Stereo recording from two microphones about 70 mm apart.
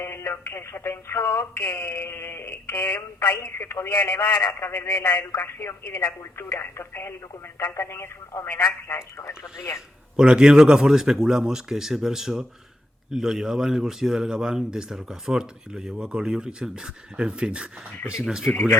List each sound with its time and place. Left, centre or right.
0.0 s speech: left
10.2 s speech: centre